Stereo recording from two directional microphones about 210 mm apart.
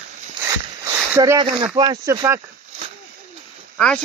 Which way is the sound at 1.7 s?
20° right (ahead or behind).